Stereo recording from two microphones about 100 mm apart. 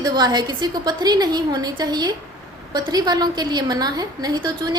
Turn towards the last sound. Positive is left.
turn(degrees=-45)  # may be behind; listen again after turning